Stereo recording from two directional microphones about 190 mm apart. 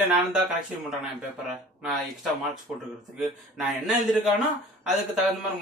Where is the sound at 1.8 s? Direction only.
Centre (ahead or behind).